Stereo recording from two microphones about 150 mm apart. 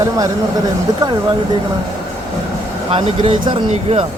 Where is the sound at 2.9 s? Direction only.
40° right (ahead or behind).